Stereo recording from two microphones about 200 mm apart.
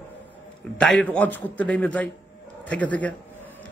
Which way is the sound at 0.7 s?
5° left (ahead or behind).